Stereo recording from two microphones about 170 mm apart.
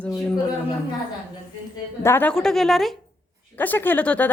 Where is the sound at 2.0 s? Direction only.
15° left (ahead or behind).